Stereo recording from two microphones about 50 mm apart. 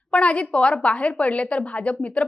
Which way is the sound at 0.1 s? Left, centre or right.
Left.